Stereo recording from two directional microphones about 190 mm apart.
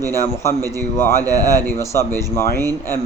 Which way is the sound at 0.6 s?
20° right (ahead or behind).